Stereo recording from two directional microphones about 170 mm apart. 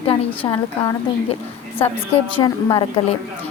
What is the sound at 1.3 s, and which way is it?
A woman's voice, 35° left (ahead or behind).